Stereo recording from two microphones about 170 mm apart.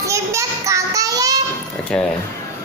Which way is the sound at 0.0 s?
20° right (ahead or behind).